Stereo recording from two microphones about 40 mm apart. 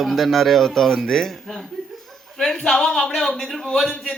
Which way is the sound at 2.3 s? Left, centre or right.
Centre.